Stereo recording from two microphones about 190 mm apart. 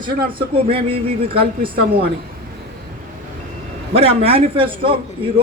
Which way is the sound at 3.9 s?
30° right (ahead or behind).